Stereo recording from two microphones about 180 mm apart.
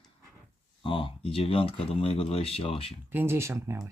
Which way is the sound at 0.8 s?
30° left (ahead or behind).